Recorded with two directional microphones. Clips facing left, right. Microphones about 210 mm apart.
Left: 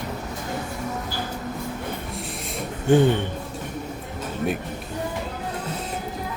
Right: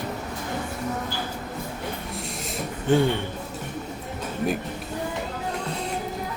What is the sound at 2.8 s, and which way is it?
Speech, 15° left (ahead or behind).